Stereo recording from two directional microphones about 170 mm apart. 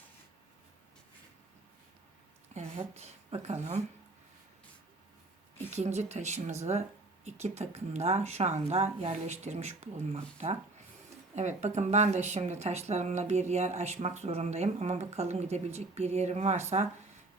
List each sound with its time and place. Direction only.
2.6 s a woman's voice: 40° right (ahead or behind)
5.7 s speech: 40° right (ahead or behind)